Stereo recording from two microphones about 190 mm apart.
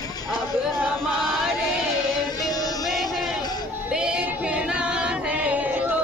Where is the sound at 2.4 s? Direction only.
20° left (ahead or behind).